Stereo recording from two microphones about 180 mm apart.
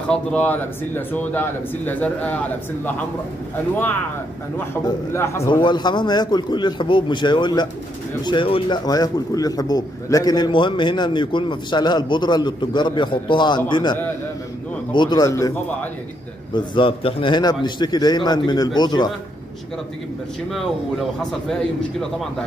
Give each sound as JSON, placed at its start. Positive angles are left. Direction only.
{"t": 0.1, "sound": "speech", "side_deg": 5}
{"t": 5.1, "sound": "speech", "side_deg": 15}
{"t": 5.5, "sound": "a man's voice", "side_deg": 25}
{"t": 16.5, "sound": "a man's voice", "side_deg": 30}
{"t": 21.2, "sound": "a man's voice", "side_deg": 5}